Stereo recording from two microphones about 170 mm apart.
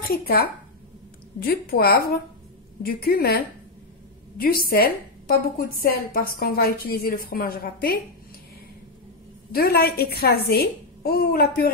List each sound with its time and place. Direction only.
0.1 s a woman's voice: 65° left (ahead or behind)
9.5 s a woman's voice: 65° left (ahead or behind)